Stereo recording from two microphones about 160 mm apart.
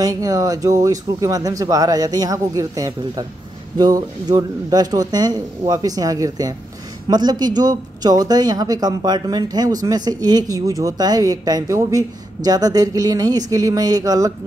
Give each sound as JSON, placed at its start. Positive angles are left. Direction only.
{"t": 0.0, "sound": "speech", "side_deg": -20}